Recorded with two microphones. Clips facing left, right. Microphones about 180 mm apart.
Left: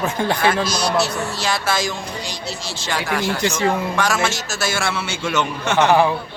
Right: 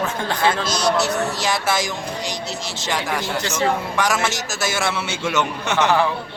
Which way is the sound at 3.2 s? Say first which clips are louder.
Left 2 dB; 15° left (ahead or behind).